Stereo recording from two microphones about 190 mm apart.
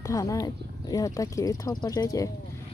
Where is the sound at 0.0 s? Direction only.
15° left (ahead or behind).